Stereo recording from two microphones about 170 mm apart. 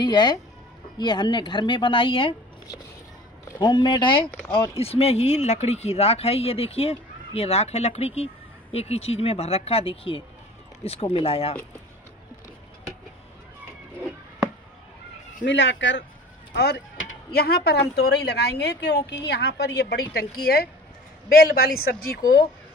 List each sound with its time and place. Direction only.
0.0 s speech: 25° left (ahead or behind)
3.5 s speech: 25° left (ahead or behind)
15.4 s speech: 90° left
16.5 s a man's voice: 75° left (ahead or behind)
21.4 s a man's voice: 65° left (ahead or behind)